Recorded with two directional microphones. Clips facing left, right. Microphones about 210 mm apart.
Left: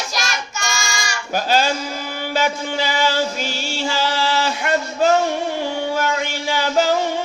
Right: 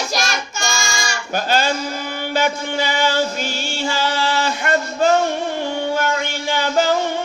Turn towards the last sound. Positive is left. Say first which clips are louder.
# even
turn(degrees=5)  # may be behind; listen again after turning